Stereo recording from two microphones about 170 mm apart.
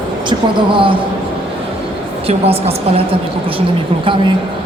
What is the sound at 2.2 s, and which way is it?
Speech, 35° right (ahead or behind).